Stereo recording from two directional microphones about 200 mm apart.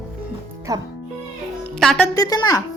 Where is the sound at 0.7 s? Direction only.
20° right (ahead or behind).